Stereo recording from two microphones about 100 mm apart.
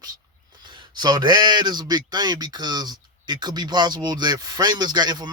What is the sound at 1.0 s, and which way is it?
Speech, 45° right (ahead or behind).